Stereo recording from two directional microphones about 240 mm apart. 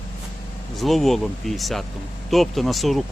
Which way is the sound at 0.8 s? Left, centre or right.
Centre.